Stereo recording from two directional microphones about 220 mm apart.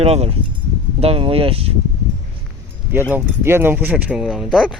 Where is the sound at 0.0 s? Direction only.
25° right (ahead or behind).